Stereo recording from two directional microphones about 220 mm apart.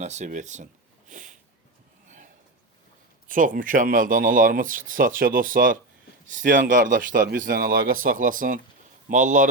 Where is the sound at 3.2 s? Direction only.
40° right (ahead or behind).